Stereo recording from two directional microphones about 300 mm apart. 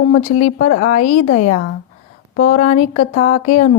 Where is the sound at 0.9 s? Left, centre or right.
Left.